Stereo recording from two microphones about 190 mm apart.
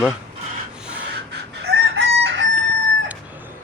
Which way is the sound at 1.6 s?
60° right (ahead or behind).